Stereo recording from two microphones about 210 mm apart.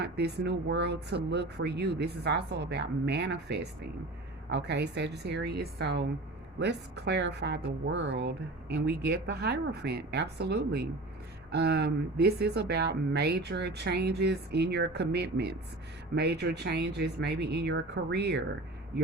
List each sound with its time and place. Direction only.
0.0 s speech: 50° right (ahead or behind)